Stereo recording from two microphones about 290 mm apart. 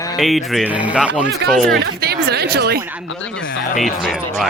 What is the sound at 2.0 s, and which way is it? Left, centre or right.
Speech, right.